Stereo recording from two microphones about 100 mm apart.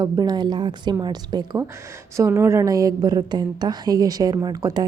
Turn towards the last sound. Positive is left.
turn(degrees=-40)  # may be behind; listen again after turning